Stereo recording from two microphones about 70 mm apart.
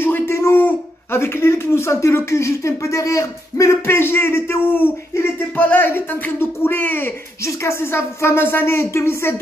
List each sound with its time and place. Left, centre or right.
0.0 s a man's voice: left
7.4 s a man's voice: left